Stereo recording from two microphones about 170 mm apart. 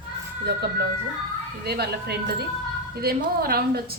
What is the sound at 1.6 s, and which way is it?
A woman's voice, 70° right (ahead or behind).